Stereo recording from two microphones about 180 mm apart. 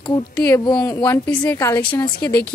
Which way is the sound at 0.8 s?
15° left (ahead or behind).